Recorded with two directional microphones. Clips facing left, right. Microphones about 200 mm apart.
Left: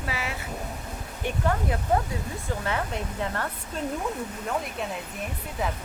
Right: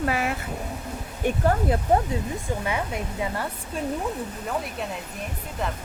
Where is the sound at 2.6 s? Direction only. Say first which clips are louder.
Right 1 dB; 10° right (ahead or behind).